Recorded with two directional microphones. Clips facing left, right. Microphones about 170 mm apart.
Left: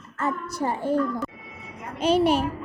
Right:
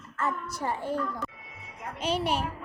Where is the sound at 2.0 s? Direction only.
40° left (ahead or behind).